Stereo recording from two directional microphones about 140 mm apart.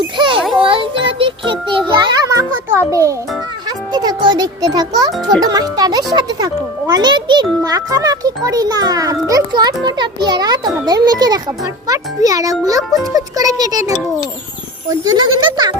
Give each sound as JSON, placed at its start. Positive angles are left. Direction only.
{"t": 0.0, "sound": "a sound", "side_deg": -35}
{"t": 0.6, "sound": "music", "side_deg": -40}
{"t": 3.9, "sound": "a child's voice", "side_deg": -30}